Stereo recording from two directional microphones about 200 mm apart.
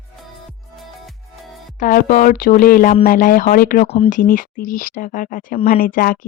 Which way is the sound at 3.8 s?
30° left (ahead or behind).